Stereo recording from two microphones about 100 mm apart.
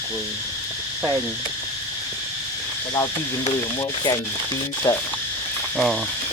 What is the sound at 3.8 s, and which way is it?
Speech, 45° left (ahead or behind).